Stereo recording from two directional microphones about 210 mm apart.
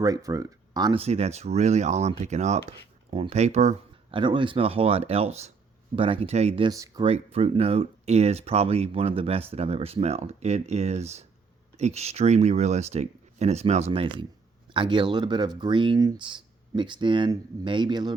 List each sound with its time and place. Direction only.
0.0 s speech: 15° right (ahead or behind)
1.0 s speech: 30° right (ahead or behind)
6.7 s speech: 15° right (ahead or behind)
7.0 s speech: 25° right (ahead or behind)